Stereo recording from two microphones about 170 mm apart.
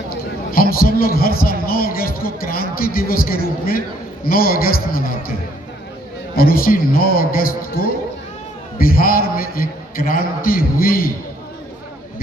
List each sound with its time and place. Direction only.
0.5 s a man's voice: 60° left (ahead or behind)